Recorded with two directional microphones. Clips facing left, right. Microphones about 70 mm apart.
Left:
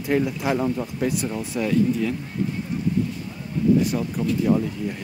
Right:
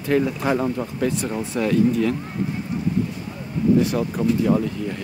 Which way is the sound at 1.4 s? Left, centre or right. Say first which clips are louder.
Right 4 dB; right.